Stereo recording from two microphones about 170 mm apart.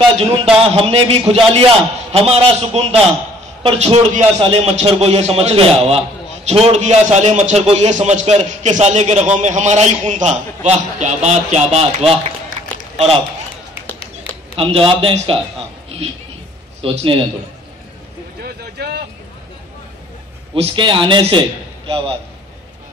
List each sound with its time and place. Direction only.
0.6 s a man's voice: 35° right (ahead or behind)
14.6 s a man's voice: 30° right (ahead or behind)
16.8 s a man's voice: 35° right (ahead or behind)
18.4 s vehicle: 70° right (ahead or behind)
20.5 s a man's voice: 35° right (ahead or behind)